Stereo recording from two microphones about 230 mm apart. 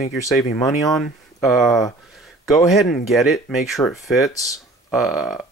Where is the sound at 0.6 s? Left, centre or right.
Centre.